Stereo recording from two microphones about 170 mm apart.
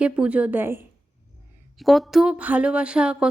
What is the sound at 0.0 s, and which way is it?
Speech, 5° right (ahead or behind).